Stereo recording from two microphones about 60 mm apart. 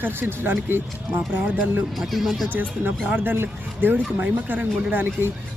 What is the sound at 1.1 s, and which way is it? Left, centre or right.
Speech, centre.